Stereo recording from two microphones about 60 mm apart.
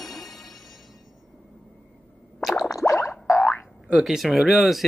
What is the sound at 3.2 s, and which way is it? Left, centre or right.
Boing, left.